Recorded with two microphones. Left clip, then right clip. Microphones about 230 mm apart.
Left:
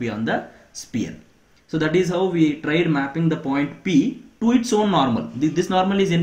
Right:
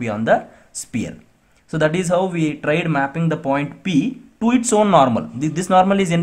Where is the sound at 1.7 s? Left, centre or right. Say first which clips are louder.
Right 3 dB; right.